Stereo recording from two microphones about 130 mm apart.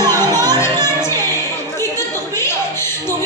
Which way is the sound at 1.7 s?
20° left (ahead or behind).